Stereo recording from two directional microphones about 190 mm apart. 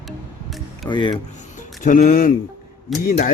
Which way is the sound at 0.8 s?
25° left (ahead or behind).